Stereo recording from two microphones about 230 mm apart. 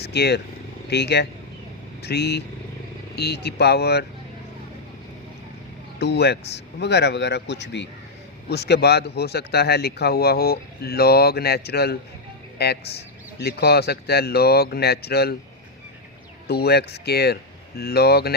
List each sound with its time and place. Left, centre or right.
0.0 s speech: left
6.0 s speech: left
16.5 s speech: left